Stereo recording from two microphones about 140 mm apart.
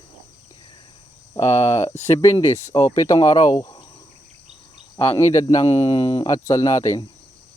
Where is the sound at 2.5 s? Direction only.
20° left (ahead or behind).